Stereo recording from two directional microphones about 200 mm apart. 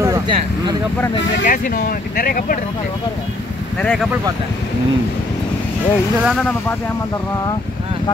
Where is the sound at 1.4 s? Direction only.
45° left (ahead or behind).